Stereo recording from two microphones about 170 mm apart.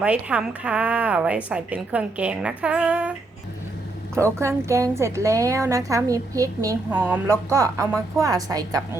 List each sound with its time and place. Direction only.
0.0 s a woman's voice: 5° right (ahead or behind)